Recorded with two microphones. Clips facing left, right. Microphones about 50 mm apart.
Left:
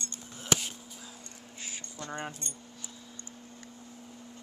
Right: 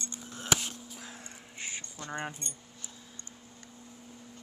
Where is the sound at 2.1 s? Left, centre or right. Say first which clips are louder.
Right 2 dB; right.